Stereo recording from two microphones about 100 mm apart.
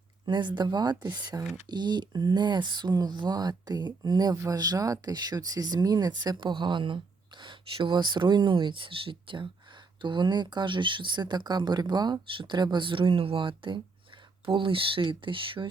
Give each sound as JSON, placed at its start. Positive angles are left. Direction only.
{"t": 0.3, "sound": "speech", "side_deg": -50}